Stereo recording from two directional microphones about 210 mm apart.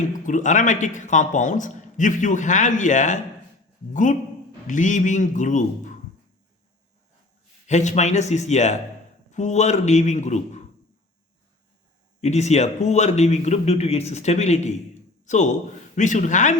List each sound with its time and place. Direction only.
0.0 s speech: 35° left (ahead or behind)
7.7 s speech: 35° left (ahead or behind)
12.2 s speech: 30° left (ahead or behind)
15.2 s a sound: 35° left (ahead or behind)
16.0 s speech: 35° left (ahead or behind)